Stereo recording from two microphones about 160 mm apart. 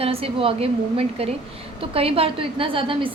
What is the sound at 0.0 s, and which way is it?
A woman's voice, 35° right (ahead or behind).